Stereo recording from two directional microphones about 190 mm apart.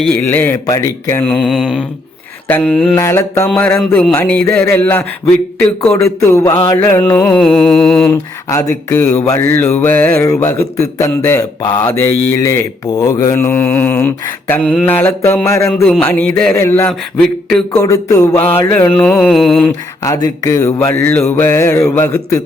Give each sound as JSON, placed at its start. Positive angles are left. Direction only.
{"t": 0.0, "sound": "mantra", "side_deg": 10}
{"t": 8.1, "sound": "mantra", "side_deg": 15}
{"t": 18.9, "sound": "mantra", "side_deg": 5}
{"t": 20.1, "sound": "mantra", "side_deg": 20}